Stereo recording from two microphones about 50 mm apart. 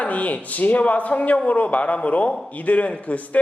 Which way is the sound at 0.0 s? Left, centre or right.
Left.